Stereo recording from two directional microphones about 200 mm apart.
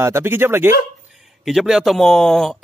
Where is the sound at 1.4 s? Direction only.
Centre (ahead or behind).